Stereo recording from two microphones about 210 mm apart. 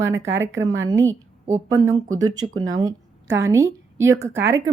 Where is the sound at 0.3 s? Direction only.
10° right (ahead or behind).